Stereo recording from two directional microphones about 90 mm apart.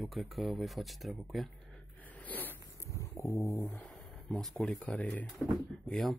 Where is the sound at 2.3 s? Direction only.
20° left (ahead or behind).